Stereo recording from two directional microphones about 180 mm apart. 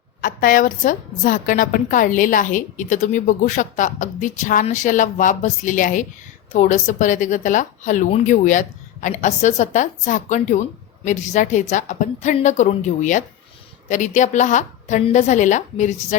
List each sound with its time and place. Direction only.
0.2 s a woman's voice: 50° left (ahead or behind)